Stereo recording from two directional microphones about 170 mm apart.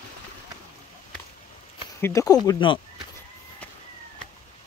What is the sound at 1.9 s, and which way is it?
Speech, 15° left (ahead or behind).